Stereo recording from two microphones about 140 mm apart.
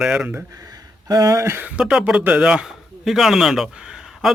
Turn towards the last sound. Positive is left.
turn(degrees=-5)  # may be behind; listen again after turning